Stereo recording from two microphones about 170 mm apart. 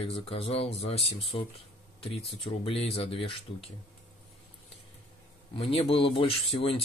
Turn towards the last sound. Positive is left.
turn(degrees=35)  # may be behind; listen again after turning